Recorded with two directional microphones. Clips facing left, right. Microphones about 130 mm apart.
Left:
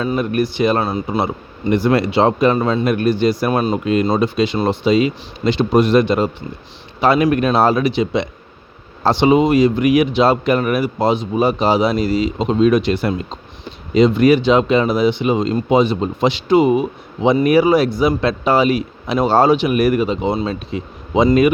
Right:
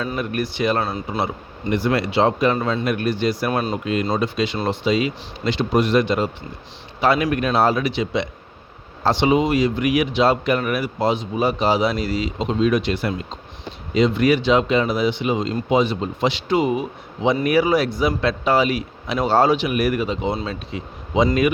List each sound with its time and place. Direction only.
0.0 s speech: 25° left (ahead or behind)
10.1 s speech: 25° left (ahead or behind)
16.2 s speech: 20° left (ahead or behind)
18.2 s speech: 25° left (ahead or behind)